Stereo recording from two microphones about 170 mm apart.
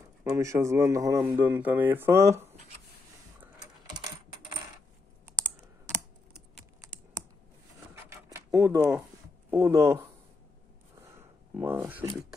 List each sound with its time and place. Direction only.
0.2 s speech: 20° right (ahead or behind)
5.2 s computer keyboard: 15° right (ahead or behind)
7.9 s a sound: 15° right (ahead or behind)
9.5 s speech: 15° right (ahead or behind)
11.5 s speech: 15° right (ahead or behind)